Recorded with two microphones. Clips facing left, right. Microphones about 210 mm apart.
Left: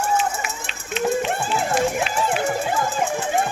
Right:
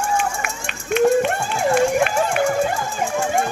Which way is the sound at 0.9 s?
55° right (ahead or behind).